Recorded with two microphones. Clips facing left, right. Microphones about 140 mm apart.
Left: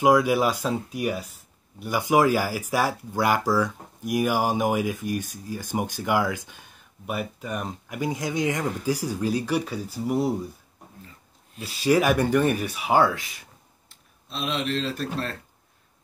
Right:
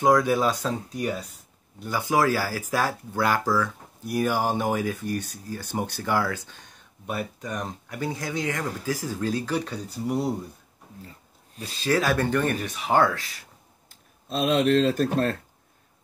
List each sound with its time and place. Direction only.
0.0 s speech: 10° left (ahead or behind)
11.6 s speech: 10° left (ahead or behind)
13.8 s speech: 45° right (ahead or behind)